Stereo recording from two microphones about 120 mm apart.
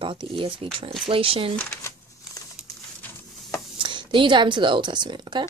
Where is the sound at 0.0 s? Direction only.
45° right (ahead or behind).